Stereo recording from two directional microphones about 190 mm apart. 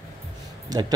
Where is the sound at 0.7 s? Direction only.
20° right (ahead or behind).